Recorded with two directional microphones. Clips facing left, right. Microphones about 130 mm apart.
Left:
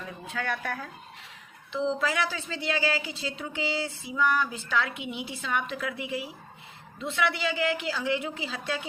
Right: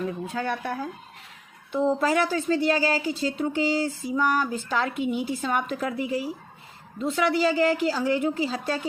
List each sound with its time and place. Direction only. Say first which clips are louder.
0.4 s speech: right 2 dB; 25° right (ahead or behind)
1.7 s speech: right 6 dB; 45° right (ahead or behind)